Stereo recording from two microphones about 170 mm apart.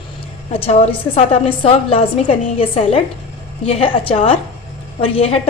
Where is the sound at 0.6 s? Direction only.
35° left (ahead or behind).